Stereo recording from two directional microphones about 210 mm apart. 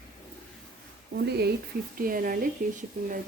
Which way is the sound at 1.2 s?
50° right (ahead or behind).